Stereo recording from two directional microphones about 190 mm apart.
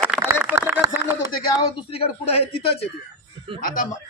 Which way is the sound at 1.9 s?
30° left (ahead or behind).